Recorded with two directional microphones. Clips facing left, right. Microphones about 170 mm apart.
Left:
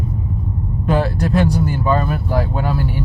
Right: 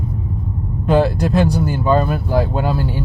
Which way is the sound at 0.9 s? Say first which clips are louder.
Right 3 dB; 20° right (ahead or behind).